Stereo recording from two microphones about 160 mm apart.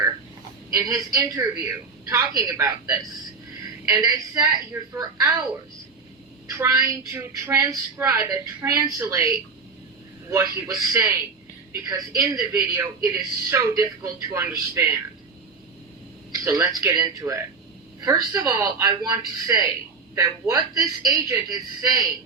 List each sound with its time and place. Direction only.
0.7 s a man's voice: 20° right (ahead or behind)
6.6 s a man's voice: 20° right (ahead or behind)
10.3 s a man's voice: 20° right (ahead or behind)
16.3 s a man's voice: 20° right (ahead or behind)